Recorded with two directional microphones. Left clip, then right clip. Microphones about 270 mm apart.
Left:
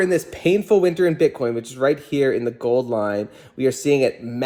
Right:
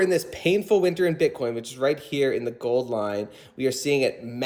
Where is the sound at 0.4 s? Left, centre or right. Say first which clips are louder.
Left 4 dB; centre.